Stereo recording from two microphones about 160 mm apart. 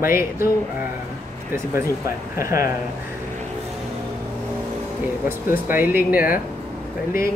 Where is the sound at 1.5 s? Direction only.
15° right (ahead or behind).